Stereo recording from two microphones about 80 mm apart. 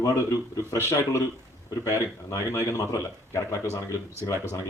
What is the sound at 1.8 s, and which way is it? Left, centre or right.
Speech, left.